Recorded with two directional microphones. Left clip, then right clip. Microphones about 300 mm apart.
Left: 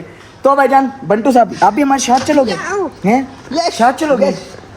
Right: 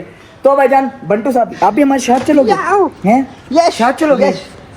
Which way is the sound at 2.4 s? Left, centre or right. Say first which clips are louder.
Right 7 dB; centre.